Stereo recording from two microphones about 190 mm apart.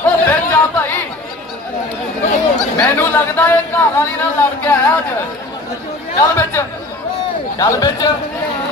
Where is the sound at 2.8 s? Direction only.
10° left (ahead or behind).